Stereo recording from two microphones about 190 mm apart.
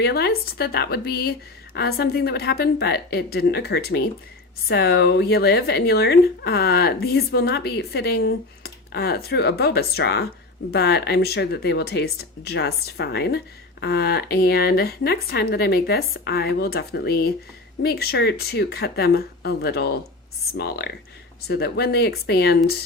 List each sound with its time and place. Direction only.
0.0 s speech: 60° left (ahead or behind)